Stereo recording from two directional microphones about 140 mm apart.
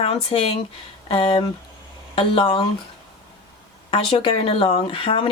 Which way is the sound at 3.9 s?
40° left (ahead or behind).